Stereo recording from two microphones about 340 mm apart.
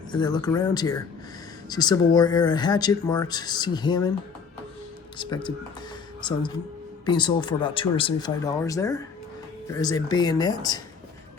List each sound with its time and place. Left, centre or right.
0.1 s speech: centre
5.1 s speech: centre
7.0 s speech: centre